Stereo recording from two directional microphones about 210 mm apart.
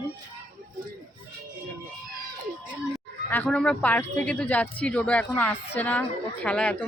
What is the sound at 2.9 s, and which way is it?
Speech, 5° left (ahead or behind).